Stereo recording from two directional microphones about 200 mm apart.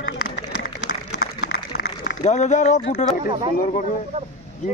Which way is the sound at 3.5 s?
50° left (ahead or behind).